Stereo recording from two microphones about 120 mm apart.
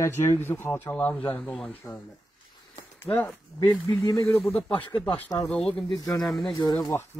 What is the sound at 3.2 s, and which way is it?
Speech, 30° left (ahead or behind).